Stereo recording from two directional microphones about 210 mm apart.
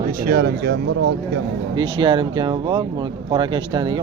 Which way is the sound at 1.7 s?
20° right (ahead or behind).